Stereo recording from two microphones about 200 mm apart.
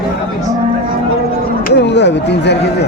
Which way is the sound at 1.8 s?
60° left (ahead or behind).